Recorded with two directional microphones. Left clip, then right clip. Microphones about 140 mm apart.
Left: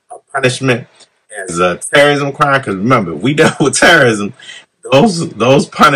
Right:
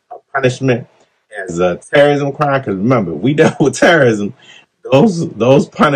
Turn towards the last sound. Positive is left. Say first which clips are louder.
# left 2 dB
turn(degrees=-5)  # may be behind; listen again after turning